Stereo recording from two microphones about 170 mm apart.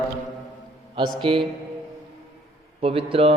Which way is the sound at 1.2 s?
30° right (ahead or behind).